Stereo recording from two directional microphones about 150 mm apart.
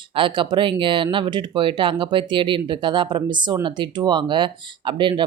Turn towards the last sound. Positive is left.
turn(degrees=-30)  # may be behind; listen again after turning